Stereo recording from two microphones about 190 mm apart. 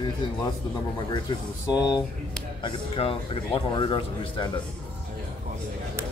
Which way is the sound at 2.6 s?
25° left (ahead or behind).